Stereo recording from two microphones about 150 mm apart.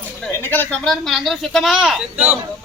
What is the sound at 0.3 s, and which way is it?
Speech, 15° left (ahead or behind).